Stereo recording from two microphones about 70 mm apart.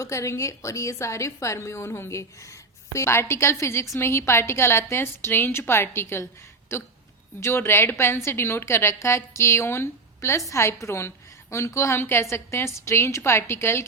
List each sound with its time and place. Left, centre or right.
0.0 s a woman's voice: left